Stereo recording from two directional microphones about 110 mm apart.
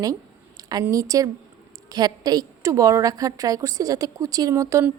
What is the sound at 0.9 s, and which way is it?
A woman's voice, 30° right (ahead or behind).